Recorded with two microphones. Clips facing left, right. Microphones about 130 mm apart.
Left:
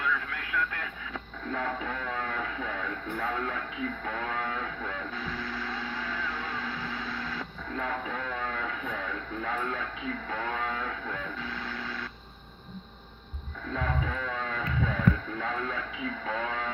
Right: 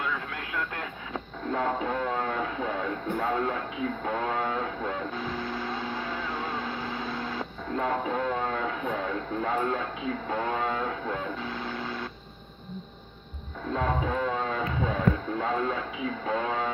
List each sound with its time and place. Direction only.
0.0 s vehicle: 25° right (ahead or behind)
1.5 s a sound: 30° right (ahead or behind)
4.0 s vehicle: 30° right (ahead or behind)
13.7 s speech: 30° right (ahead or behind)